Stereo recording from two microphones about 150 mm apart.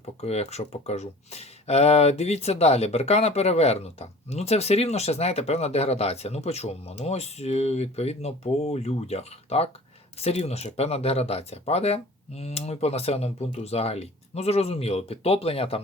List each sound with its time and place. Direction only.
0.0 s speech: 45° left (ahead or behind)